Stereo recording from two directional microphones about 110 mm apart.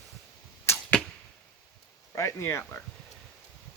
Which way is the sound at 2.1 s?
25° left (ahead or behind).